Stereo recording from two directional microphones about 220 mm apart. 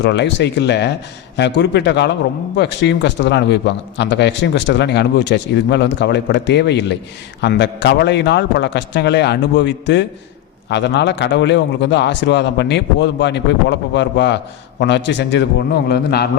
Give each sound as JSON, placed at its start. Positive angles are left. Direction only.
{"t": 0.0, "sound": "a man's voice", "side_deg": 50}